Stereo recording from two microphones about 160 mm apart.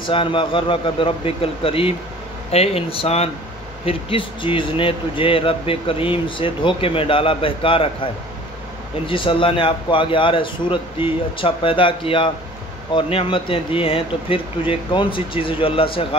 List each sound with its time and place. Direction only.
0.0 s speech: 30° left (ahead or behind)